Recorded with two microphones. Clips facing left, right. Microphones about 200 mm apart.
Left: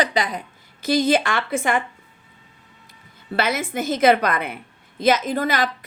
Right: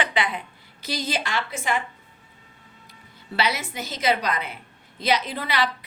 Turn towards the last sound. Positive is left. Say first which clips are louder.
# left 5 dB
turn(degrees=45)  # may be behind; listen again after turning